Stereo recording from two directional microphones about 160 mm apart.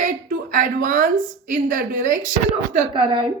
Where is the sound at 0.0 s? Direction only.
55° right (ahead or behind).